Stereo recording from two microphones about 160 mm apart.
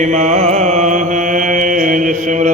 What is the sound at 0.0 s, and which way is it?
Mantra, 50° right (ahead or behind).